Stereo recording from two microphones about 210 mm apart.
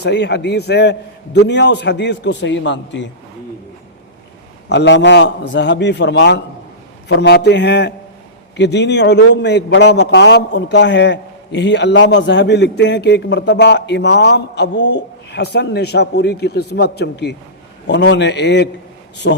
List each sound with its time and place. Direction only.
0.0 s a man's voice: 55° left (ahead or behind)
4.7 s a man's voice: 55° left (ahead or behind)